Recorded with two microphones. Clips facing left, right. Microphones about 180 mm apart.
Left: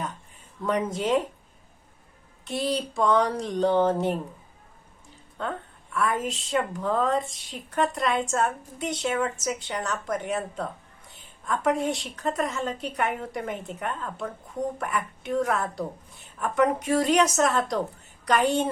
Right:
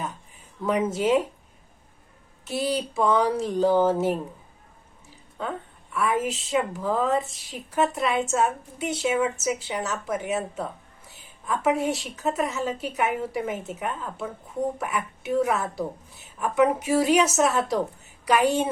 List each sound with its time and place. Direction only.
0.6 s a woman's voice: 5° right (ahead or behind)
2.4 s a woman's voice: 5° right (ahead or behind)
5.4 s a woman's voice: 5° right (ahead or behind)